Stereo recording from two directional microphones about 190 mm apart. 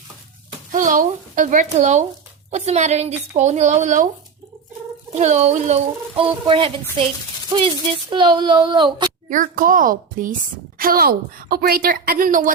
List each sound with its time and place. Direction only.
0.7 s a woman's voice: 40° right (ahead or behind)
5.1 s a woman's voice: 35° right (ahead or behind)
9.3 s a woman's voice: 45° right (ahead or behind)